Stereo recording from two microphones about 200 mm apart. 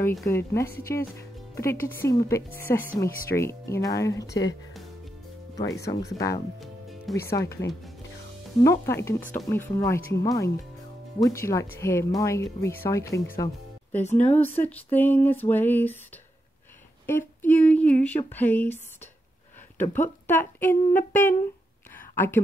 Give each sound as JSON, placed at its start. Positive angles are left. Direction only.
{"t": 0.2, "sound": "speech", "side_deg": 15}
{"t": 6.1, "sound": "speech", "side_deg": 15}
{"t": 6.6, "sound": "music", "side_deg": 0}
{"t": 7.3, "sound": "speech", "side_deg": 15}
{"t": 14.0, "sound": "speech", "side_deg": 35}
{"t": 14.6, "sound": "speech", "side_deg": 10}
{"t": 17.0, "sound": "speech", "side_deg": 10}
{"t": 20.0, "sound": "speech", "side_deg": 10}
{"t": 21.9, "sound": "a sound", "side_deg": 10}